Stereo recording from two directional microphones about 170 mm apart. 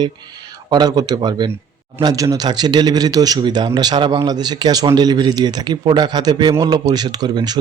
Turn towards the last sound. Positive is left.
turn(degrees=-25)  # may be behind; listen again after turning